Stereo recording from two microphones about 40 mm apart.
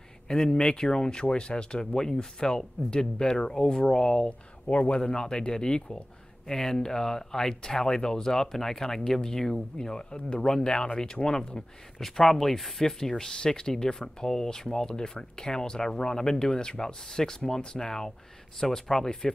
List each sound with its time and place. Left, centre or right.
0.3 s speech: centre
4.6 s speech: left
12.0 s speech: centre
13.1 s speech: left
14.9 s speech: left